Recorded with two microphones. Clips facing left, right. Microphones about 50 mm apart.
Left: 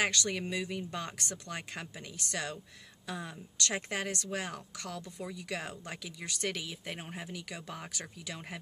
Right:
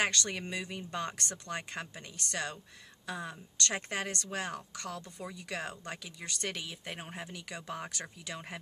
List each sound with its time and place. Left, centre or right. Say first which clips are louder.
0.0 s speech: left 1 dB; centre